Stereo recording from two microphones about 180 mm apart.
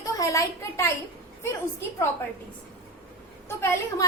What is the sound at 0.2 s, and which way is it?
Speech, 15° left (ahead or behind).